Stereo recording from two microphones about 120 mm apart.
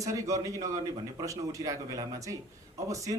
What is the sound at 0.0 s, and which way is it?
Speech, 25° right (ahead or behind).